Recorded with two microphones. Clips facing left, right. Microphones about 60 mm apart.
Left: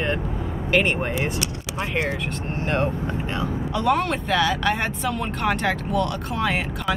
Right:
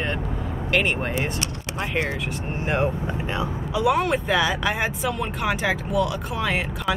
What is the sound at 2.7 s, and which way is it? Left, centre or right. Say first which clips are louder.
Speech: even; centre.